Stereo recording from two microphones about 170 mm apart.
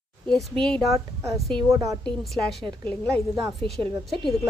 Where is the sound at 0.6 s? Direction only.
Centre (ahead or behind).